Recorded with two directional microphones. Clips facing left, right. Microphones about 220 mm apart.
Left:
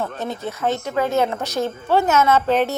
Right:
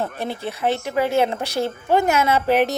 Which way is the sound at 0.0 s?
15° right (ahead or behind).